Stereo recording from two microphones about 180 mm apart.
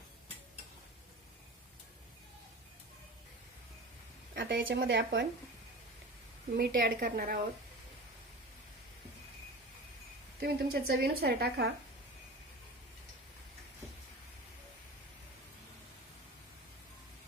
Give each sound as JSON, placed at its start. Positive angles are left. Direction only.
{"t": 4.4, "sound": "a woman's voice", "side_deg": -80}
{"t": 4.7, "sound": "speech", "side_deg": -65}
{"t": 6.6, "sound": "a woman's voice", "side_deg": -60}
{"t": 10.4, "sound": "a woman's voice", "side_deg": -60}